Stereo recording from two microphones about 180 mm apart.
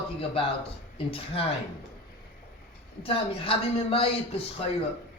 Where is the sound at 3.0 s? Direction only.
30° left (ahead or behind).